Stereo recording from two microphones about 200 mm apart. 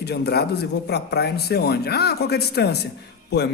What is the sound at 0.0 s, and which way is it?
Speech, 55° left (ahead or behind).